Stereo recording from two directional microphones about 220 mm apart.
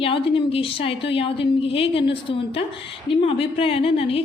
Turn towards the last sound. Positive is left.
turn(degrees=25)  # may be behind; listen again after turning